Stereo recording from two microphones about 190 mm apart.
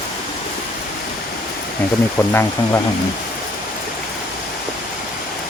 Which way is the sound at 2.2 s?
15° left (ahead or behind).